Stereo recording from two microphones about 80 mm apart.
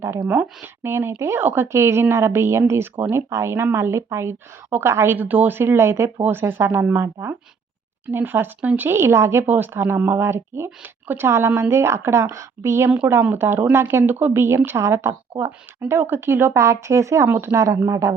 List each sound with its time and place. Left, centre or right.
0.6 s speech: right
17.2 s speech: right
17.5 s speech: right